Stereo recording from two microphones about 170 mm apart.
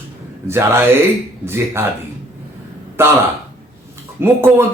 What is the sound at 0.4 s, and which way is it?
A man's voice, 15° right (ahead or behind).